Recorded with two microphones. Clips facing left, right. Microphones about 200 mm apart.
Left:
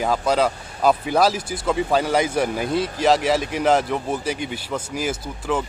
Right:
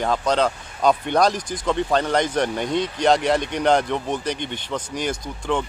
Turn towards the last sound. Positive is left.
turn(degrees=5)  # may be behind; listen again after turning